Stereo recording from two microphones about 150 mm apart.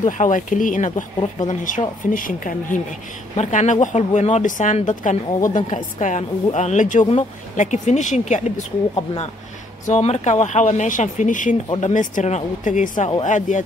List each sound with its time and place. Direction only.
0.0 s a woman's voice: 55° left (ahead or behind)
3.3 s a woman's voice: 55° left (ahead or behind)
8.9 s speech: 35° left (ahead or behind)
9.8 s a woman's voice: 50° left (ahead or behind)